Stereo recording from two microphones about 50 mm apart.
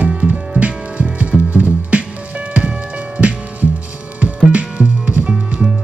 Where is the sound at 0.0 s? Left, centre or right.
Right.